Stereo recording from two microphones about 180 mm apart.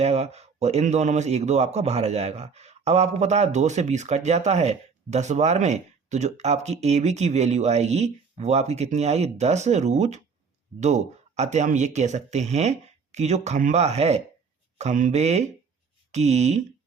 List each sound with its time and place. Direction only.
0.0 s a man's voice: 35° right (ahead or behind)